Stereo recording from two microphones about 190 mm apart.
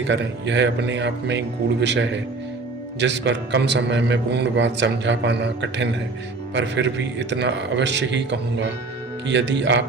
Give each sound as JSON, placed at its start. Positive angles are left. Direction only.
{"t": 0.1, "sound": "a man's voice", "side_deg": -70}